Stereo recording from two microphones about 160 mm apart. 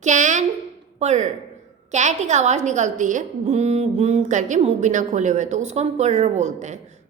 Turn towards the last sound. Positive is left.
turn(degrees=-50)  # may be behind; listen again after turning